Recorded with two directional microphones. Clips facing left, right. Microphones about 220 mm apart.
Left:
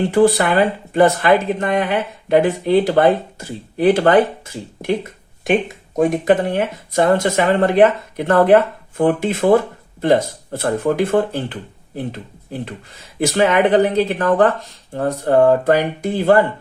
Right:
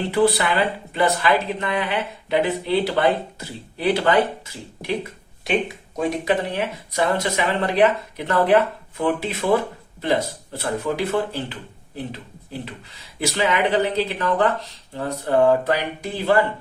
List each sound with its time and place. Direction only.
0.0 s speech: 45° left (ahead or behind)
5.5 s speech: 50° left (ahead or behind)
12.6 s speech: 50° left (ahead or behind)